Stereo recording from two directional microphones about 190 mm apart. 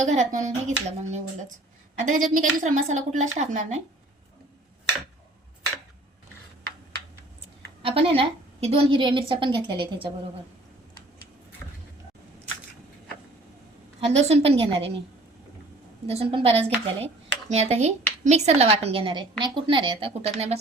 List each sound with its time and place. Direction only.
0.0 s a woman's voice: 40° right (ahead or behind)
7.8 s a woman's voice: 30° right (ahead or behind)
14.0 s a woman's voice: 35° right (ahead or behind)
16.0 s a woman's voice: 30° right (ahead or behind)